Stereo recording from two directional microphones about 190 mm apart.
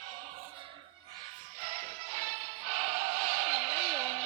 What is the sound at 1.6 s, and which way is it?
Music, 35° right (ahead or behind).